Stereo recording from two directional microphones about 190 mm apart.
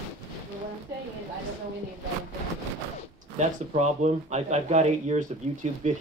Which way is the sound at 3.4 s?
35° right (ahead or behind).